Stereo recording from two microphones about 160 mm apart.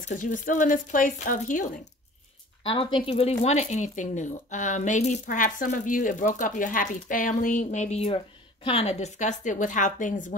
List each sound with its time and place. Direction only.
0.1 s speech: 55° left (ahead or behind)
2.6 s speech: 35° left (ahead or behind); by 10.2 s 50° left (ahead or behind)